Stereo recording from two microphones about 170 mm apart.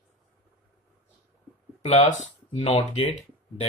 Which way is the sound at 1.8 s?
40° left (ahead or behind).